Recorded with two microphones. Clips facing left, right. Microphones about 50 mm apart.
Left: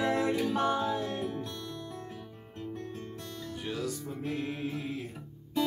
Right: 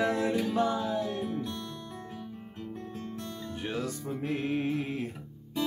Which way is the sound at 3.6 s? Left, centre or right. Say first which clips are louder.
Right 2 dB; right.